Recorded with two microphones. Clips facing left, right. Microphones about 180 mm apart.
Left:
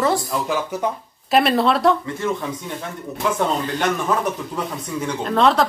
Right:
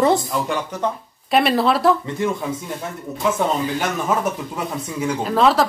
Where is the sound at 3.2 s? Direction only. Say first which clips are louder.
Right 1 dB; 5° right (ahead or behind).